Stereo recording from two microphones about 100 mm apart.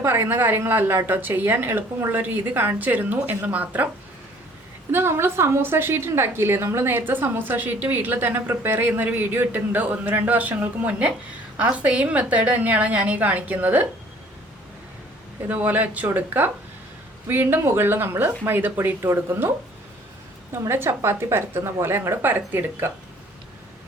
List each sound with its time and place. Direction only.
0.0 s a woman's voice: 20° right (ahead or behind)
4.9 s a woman's voice: 25° right (ahead or behind)
15.4 s a woman's voice: 20° right (ahead or behind)